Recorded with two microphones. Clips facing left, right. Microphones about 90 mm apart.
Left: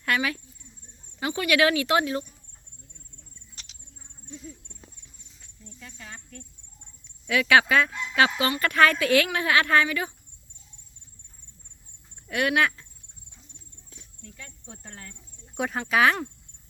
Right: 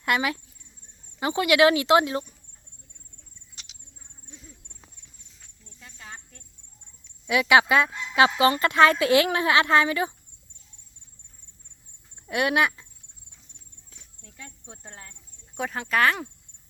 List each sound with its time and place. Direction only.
0.0 s speech: 20° right (ahead or behind)
5.8 s a sound: 25° right (ahead or behind)
7.3 s speech: 20° right (ahead or behind)
12.3 s speech: 20° right (ahead or behind)
14.2 s cricket: 20° right (ahead or behind)
15.5 s speech: centre (ahead or behind)